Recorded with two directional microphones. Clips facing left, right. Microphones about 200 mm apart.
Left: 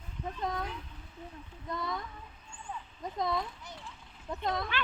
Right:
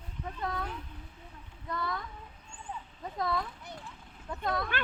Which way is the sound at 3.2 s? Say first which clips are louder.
Even; 20° left (ahead or behind).